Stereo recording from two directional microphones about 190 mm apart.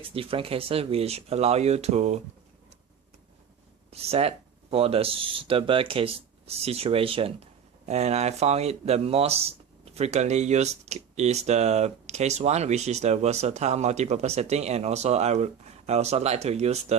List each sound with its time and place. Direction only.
0.0 s speech: 30° right (ahead or behind)
4.0 s speech: 30° right (ahead or behind)